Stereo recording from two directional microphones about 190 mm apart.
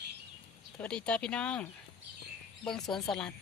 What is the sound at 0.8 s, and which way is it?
Speech, 5° left (ahead or behind).